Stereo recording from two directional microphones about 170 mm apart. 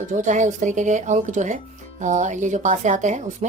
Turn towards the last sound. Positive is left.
turn(degrees=-45)  # may be behind; listen again after turning